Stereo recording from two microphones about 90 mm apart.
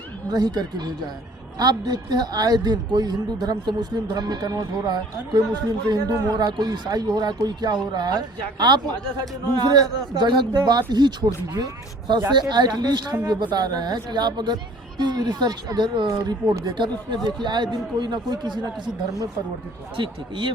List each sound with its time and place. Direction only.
0.3 s a man's voice: 50° right (ahead or behind)
20.0 s speech: 70° right (ahead or behind)